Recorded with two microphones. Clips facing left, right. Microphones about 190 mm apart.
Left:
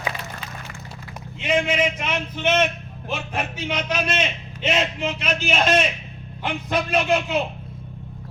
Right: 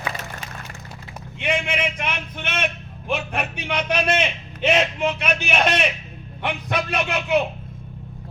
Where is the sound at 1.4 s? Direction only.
60° right (ahead or behind).